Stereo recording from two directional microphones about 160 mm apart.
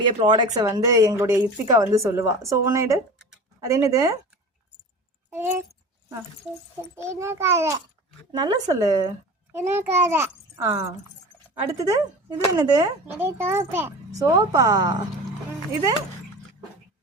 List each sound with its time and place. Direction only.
0.2 s a woman's voice: 30° right (ahead or behind)
5.3 s a child's voice: 15° right (ahead or behind)
6.9 s a child's voice: 15° right (ahead or behind)
11.9 s a woman's voice: 25° right (ahead or behind)
13.1 s a child's voice: 15° right (ahead or behind)